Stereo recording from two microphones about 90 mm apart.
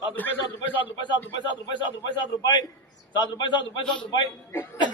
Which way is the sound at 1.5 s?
60° left (ahead or behind).